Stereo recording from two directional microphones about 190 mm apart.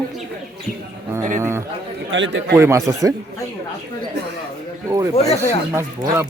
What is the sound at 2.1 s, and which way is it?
Speech, 75° right (ahead or behind).